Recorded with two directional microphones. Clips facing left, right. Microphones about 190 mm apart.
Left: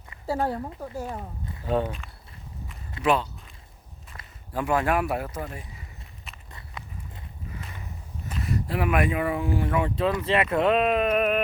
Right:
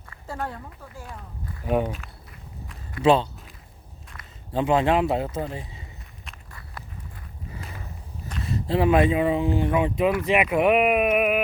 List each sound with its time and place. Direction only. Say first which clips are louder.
0.3 s speech: left 6 dB; 35° left (ahead or behind)
1.6 s speech: right 2 dB; 10° right (ahead or behind)
3.0 s speech: right 5 dB; 30° right (ahead or behind)
4.5 s speech: right 4 dB; 20° right (ahead or behind)
8.4 s speech: right 5 dB; 25° right (ahead or behind); by 11.4 s 10° right (ahead or behind)